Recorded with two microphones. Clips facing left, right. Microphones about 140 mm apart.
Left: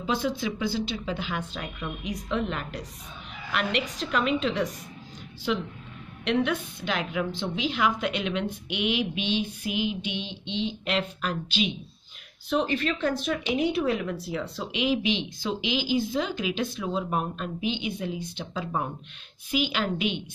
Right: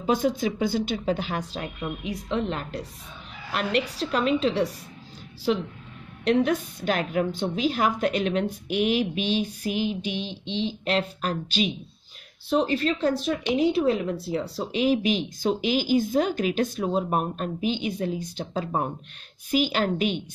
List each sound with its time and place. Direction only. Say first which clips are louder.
0.0 s speech: right 4 dB; 45° right (ahead or behind)